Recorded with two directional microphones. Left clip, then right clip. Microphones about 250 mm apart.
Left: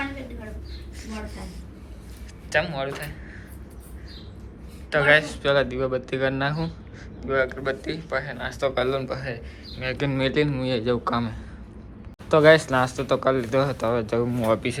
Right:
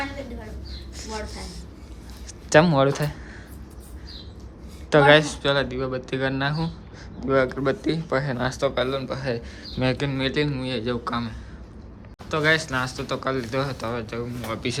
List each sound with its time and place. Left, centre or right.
0.9 s a sound: right
2.5 s speech: right
4.9 s speech: centre
8.6 s speech: centre